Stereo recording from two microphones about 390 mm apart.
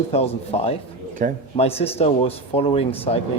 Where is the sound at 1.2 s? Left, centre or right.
Right.